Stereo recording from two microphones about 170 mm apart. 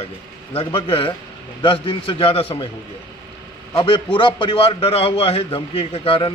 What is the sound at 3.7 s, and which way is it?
A man's voice, 25° left (ahead or behind).